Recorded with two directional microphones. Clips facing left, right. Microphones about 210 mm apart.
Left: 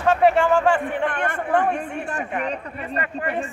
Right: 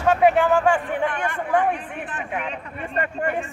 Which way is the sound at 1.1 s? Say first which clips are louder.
Left 1 dB; 55° left (ahead or behind).